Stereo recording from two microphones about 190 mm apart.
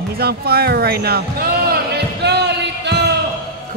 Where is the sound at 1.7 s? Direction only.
60° right (ahead or behind).